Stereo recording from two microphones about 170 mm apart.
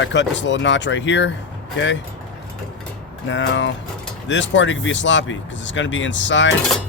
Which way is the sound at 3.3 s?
90° left.